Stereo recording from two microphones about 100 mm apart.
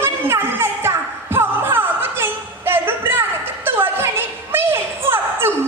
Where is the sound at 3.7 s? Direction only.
20° right (ahead or behind).